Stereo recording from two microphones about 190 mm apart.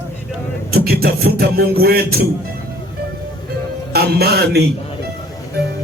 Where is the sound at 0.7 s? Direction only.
50° right (ahead or behind).